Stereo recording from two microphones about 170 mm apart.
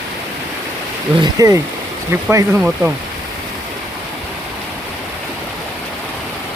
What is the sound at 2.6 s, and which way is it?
Speech, 5° right (ahead or behind).